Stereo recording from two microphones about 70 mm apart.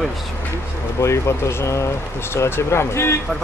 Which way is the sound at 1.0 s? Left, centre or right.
Left.